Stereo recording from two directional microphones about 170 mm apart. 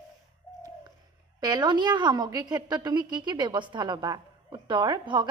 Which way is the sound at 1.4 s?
25° right (ahead or behind).